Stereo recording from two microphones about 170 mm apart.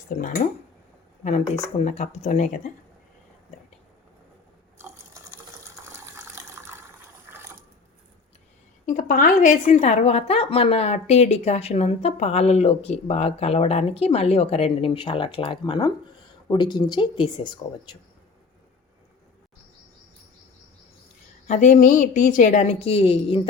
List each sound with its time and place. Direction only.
0.1 s a woman's voice: 50° left (ahead or behind)
1.8 s a woman's voice: 40° left (ahead or behind)
5.8 s water: 15° right (ahead or behind)
7.3 s mechanisms: 15° right (ahead or behind)
8.9 s a woman's voice: 50° left (ahead or behind); by 17.9 s 25° left (ahead or behind)
21.4 s a woman's voice: 45° left (ahead or behind)